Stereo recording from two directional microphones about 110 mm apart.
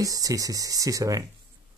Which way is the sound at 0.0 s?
30° right (ahead or behind).